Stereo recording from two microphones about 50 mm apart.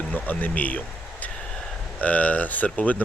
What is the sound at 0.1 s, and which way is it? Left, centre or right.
Speech, left.